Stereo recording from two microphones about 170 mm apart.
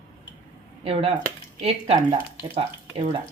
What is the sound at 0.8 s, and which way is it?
Speech, 35° right (ahead or behind).